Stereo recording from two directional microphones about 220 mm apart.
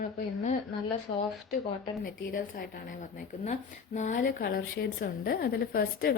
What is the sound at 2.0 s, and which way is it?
Speech, 45° left (ahead or behind).